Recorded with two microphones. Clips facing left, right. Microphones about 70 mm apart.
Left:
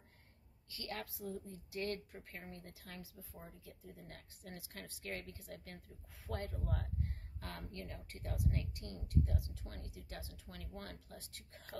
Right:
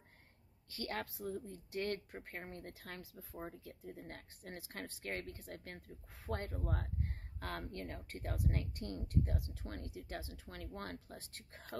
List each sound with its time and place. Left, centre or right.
0.7 s speech: right